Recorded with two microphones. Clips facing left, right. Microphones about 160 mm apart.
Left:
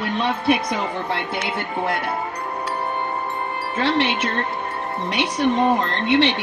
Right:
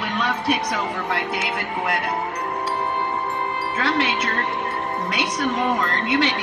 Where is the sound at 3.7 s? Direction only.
25° left (ahead or behind).